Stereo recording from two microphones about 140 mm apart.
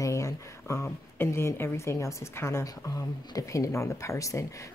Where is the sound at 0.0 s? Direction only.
20° left (ahead or behind).